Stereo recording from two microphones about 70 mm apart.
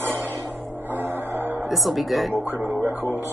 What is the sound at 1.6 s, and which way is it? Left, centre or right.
Speech, centre.